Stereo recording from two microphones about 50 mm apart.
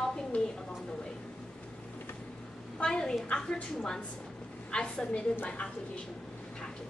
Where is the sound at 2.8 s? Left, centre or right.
Centre.